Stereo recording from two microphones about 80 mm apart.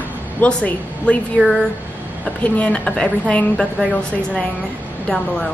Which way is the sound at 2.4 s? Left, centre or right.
Centre.